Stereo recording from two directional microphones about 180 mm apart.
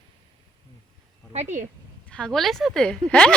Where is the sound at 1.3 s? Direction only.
40° right (ahead or behind).